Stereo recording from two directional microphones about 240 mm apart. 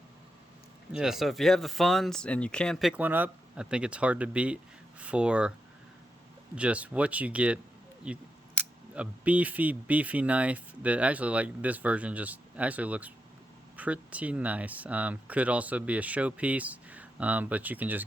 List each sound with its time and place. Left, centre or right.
0.9 s speech: centre
6.6 s speech: centre